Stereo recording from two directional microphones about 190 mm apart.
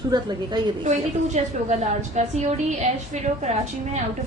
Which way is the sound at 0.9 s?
35° right (ahead or behind).